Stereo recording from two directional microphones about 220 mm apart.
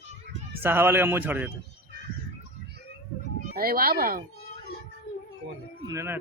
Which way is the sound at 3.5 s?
45° right (ahead or behind).